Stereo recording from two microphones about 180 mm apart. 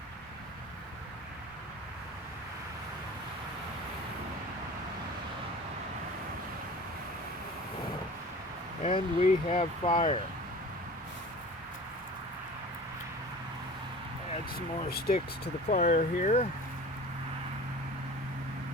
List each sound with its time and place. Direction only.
8.8 s speech: 30° left (ahead or behind)
14.8 s speech: 55° left (ahead or behind)
15.7 s speech: 40° left (ahead or behind)